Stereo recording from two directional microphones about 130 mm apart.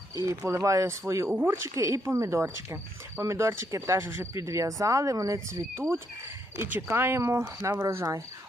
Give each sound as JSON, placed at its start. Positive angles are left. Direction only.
{"t": 0.2, "sound": "speech", "side_deg": -20}